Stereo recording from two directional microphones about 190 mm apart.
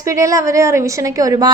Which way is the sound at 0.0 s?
15° right (ahead or behind).